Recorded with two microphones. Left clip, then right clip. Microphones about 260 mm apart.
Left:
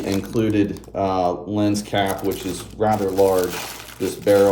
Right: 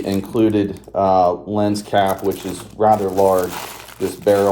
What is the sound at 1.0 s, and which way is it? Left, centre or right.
Speech, right.